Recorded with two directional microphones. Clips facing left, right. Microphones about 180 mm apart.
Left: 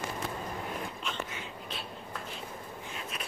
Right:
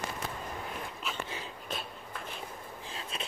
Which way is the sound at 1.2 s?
35° right (ahead or behind).